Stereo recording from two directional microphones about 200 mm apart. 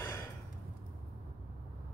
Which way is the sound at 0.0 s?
10° left (ahead or behind).